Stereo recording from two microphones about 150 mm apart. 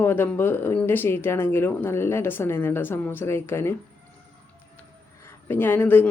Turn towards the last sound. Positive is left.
turn(degrees=15)  # may be behind; listen again after turning